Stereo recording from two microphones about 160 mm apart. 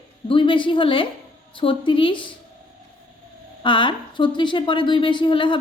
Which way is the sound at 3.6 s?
30° left (ahead or behind).